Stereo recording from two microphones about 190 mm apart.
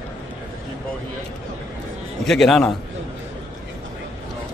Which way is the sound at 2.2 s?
Centre (ahead or behind).